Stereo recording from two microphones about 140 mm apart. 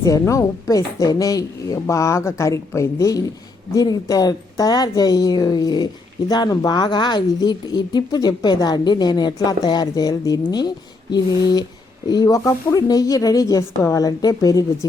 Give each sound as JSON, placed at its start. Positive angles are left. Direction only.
{"t": 0.0, "sound": "a woman's voice", "side_deg": 20}